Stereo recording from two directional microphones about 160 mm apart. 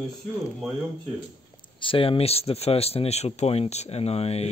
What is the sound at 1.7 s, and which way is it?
Speech, 35° left (ahead or behind).